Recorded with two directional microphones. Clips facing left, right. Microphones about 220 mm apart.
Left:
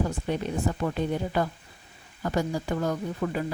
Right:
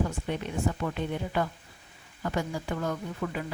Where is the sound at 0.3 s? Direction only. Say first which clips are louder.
Left 3 dB; 35° left (ahead or behind).